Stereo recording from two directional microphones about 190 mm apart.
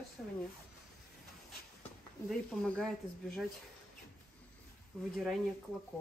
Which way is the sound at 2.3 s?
5° left (ahead or behind).